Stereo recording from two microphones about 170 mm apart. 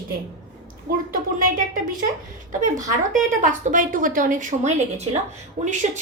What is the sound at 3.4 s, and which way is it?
A woman's voice, 50° right (ahead or behind).